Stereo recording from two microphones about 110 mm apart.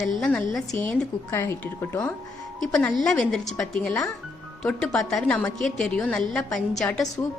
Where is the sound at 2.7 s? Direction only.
5° left (ahead or behind).